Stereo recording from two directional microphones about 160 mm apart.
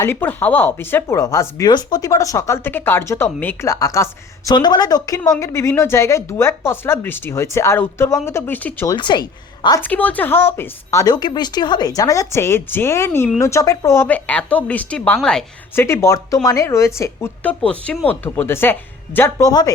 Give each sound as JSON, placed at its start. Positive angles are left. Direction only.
{"t": 0.0, "sound": "a woman's voice", "side_deg": 15}
{"t": 8.9, "sound": "speech", "side_deg": 30}
{"t": 9.8, "sound": "a woman's voice", "side_deg": 10}
{"t": 15.7, "sound": "a woman's voice", "side_deg": 15}